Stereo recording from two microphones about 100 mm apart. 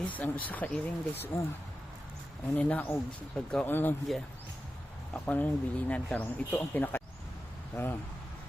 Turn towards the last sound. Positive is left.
turn(degrees=30)  # may be behind; listen again after turning